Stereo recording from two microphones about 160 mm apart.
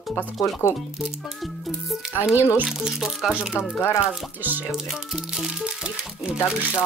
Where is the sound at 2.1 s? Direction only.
15° left (ahead or behind).